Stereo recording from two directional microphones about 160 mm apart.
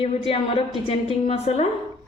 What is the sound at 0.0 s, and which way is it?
A woman's voice, 35° left (ahead or behind).